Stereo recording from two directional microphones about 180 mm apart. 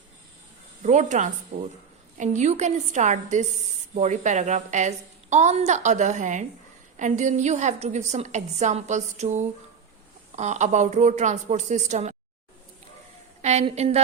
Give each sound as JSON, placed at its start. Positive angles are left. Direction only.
{"t": 0.8, "sound": "a woman's voice", "side_deg": -40}
{"t": 13.4, "sound": "a woman's voice", "side_deg": -40}